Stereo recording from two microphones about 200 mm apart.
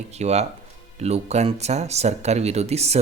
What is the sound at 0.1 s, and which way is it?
Speech, 35° right (ahead or behind).